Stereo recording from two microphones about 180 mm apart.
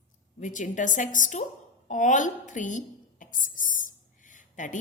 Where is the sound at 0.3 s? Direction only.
45° left (ahead or behind).